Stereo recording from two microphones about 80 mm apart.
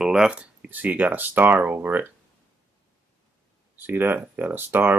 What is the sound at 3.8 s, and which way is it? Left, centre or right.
Speech, right.